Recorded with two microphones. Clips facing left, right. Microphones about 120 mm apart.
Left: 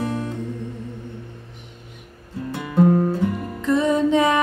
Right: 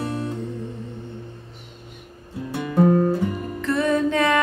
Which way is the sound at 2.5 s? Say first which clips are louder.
Left 1 dB; 20° right (ahead or behind).